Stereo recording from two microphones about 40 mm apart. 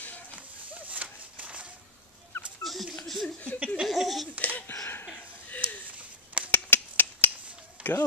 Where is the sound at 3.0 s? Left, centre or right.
Centre.